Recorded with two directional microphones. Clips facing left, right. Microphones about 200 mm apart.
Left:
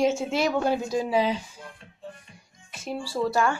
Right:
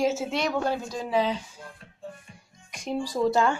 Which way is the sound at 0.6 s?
15° left (ahead or behind).